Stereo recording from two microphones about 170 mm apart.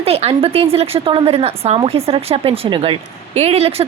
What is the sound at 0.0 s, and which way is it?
Speech, 35° right (ahead or behind).